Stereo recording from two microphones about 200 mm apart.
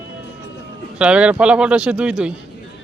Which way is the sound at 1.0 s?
5° right (ahead or behind).